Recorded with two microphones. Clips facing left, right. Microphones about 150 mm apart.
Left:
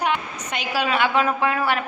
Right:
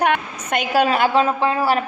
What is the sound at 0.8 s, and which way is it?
Speech, 40° right (ahead or behind).